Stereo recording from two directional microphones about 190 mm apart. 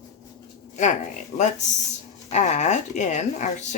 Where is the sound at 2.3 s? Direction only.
40° left (ahead or behind).